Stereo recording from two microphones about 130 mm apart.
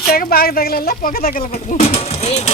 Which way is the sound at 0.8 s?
90° left.